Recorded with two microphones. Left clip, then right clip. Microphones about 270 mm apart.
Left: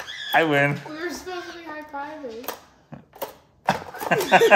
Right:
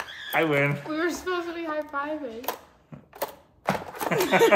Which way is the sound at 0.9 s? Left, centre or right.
Right.